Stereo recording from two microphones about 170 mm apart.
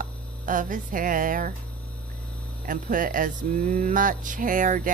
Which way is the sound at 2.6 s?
50° right (ahead or behind).